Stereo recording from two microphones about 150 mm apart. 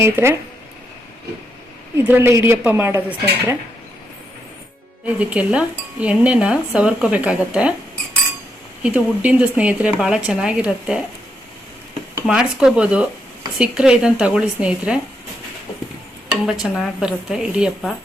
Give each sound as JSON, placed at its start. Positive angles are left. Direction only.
{"t": 0.0, "sound": "cutlery", "side_deg": -15}
{"t": 2.0, "sound": "cutlery", "side_deg": -15}
{"t": 5.0, "sound": "cutlery", "side_deg": -10}
{"t": 8.8, "sound": "cutlery", "side_deg": -10}
{"t": 12.3, "sound": "cutlery", "side_deg": -5}
{"t": 13.6, "sound": "speech", "side_deg": -5}
{"t": 16.5, "sound": "speech", "side_deg": -5}